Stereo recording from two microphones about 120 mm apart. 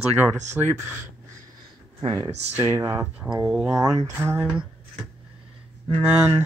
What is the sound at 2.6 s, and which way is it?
Speech, 20° right (ahead or behind).